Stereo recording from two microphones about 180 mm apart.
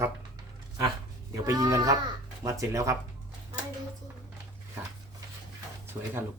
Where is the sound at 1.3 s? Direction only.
20° right (ahead or behind).